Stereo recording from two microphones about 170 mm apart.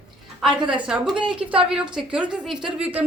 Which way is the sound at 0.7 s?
5° right (ahead or behind).